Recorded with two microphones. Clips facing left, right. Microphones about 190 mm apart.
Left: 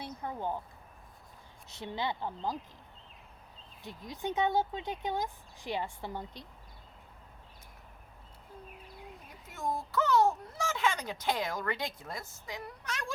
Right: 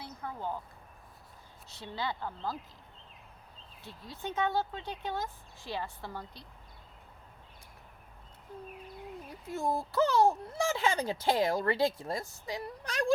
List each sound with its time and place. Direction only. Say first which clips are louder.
0.2 s speech: left 1 dB; 15° left (ahead or behind)
1.7 s speech: left 2 dB; 20° left (ahead or behind)
3.8 s speech: left 3 dB; 15° left (ahead or behind)
9.5 s speech: right 3 dB; 30° right (ahead or behind)